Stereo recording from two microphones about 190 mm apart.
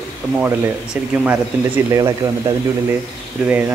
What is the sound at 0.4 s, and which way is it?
A man's voice, 10° right (ahead or behind).